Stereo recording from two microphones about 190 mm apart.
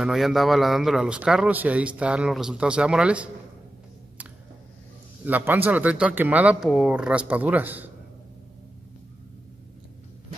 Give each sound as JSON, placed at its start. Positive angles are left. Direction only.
{"t": 0.0, "sound": "a man's voice", "side_deg": 0}
{"t": 5.2, "sound": "speech", "side_deg": -10}